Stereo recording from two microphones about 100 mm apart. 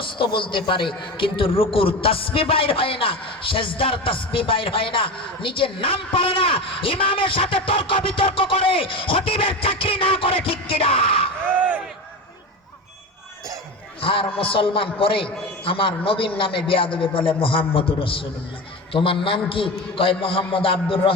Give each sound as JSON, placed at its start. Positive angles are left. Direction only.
{"t": 0.0, "sound": "a man's voice", "side_deg": 55}
{"t": 14.0, "sound": "a man's voice", "side_deg": 65}